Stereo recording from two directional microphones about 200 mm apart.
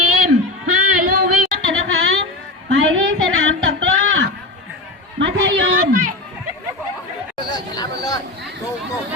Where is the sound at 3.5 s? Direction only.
75° right (ahead or behind).